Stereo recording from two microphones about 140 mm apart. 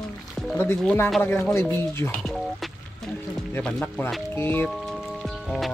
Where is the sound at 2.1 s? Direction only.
5° left (ahead or behind).